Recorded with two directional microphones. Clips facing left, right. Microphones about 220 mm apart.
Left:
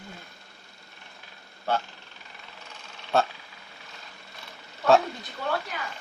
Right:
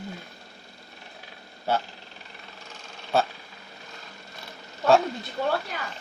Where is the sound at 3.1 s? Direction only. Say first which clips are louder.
Even; centre (ahead or behind).